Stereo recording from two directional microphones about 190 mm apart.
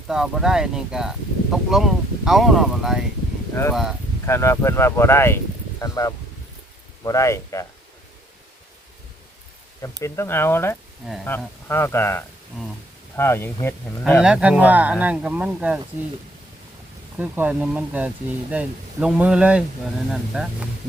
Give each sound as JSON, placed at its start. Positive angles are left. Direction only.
{"t": 0.1, "sound": "speech", "side_deg": -5}
{"t": 3.5, "sound": "speech", "side_deg": 15}
{"t": 10.0, "sound": "speech", "side_deg": 15}
{"t": 11.0, "sound": "speech", "side_deg": 0}
{"t": 11.3, "sound": "speech", "side_deg": 10}
{"t": 14.2, "sound": "speech", "side_deg": -5}
{"t": 17.2, "sound": "speech", "side_deg": -10}